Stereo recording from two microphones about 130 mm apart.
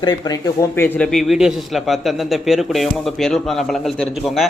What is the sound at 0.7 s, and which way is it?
Speech, 15° left (ahead or behind).